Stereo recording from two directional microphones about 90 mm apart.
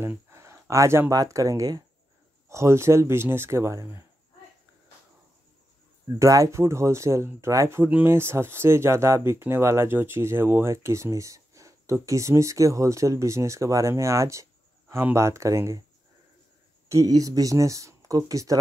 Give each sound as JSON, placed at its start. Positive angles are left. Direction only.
{"t": 0.3, "sound": "a sound", "side_deg": -30}
{"t": 1.1, "sound": "speech", "side_deg": -40}
{"t": 2.5, "sound": "speech", "side_deg": -30}
{"t": 6.1, "sound": "speech", "side_deg": -40}
{"t": 16.9, "sound": "speech", "side_deg": -40}